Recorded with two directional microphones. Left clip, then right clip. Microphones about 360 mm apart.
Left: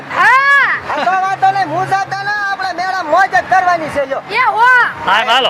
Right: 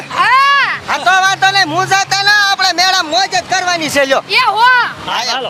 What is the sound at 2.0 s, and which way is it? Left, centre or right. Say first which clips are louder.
Music: right 6 dB; right.